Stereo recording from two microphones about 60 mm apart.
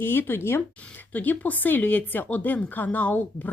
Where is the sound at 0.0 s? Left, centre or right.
Left.